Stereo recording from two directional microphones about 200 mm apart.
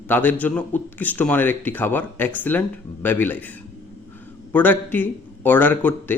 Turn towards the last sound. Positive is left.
turn(degrees=10)  # may be behind; listen again after turning